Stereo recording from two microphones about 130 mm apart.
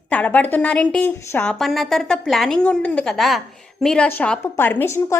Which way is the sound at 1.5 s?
Centre (ahead or behind).